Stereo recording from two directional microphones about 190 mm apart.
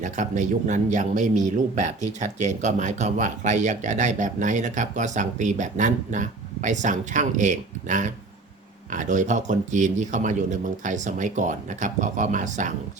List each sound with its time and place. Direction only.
0.0 s speech: 40° right (ahead or behind)